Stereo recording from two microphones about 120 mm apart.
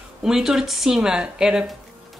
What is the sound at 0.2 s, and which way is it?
Speech, 5° right (ahead or behind).